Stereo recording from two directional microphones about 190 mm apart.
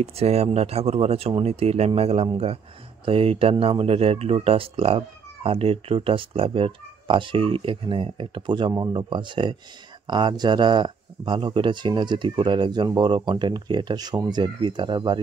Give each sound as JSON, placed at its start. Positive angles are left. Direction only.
{"t": 0.0, "sound": "speech", "side_deg": -30}